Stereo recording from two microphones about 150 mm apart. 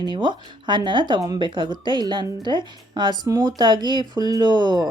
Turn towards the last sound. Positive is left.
turn(degrees=-30)  # may be behind; listen again after turning